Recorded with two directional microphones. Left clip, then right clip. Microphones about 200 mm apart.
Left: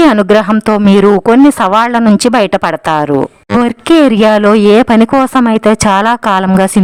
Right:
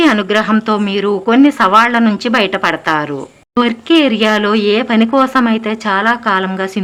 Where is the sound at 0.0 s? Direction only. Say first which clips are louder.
Left 5 dB; 50° left (ahead or behind).